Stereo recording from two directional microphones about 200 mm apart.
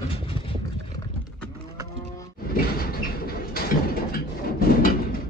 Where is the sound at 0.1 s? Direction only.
25° left (ahead or behind).